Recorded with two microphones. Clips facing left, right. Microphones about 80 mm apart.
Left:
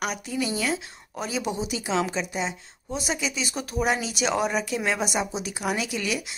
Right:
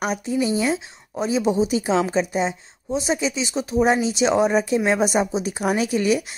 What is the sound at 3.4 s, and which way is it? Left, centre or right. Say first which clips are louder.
Speech: right 7 dB; right.